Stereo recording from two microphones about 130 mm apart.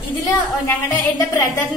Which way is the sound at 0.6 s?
20° left (ahead or behind).